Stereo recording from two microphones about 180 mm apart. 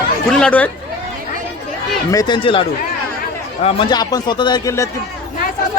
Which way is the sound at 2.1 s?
25° left (ahead or behind).